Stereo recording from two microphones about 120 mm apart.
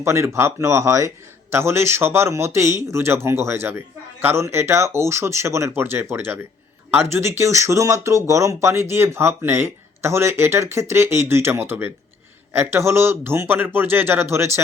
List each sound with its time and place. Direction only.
0.0 s a man's voice: 20° right (ahead or behind)